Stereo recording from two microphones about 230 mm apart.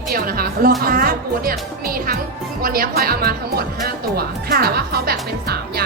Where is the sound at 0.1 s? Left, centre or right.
Right.